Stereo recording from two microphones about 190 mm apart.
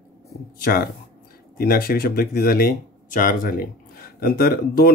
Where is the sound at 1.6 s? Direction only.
50° left (ahead or behind).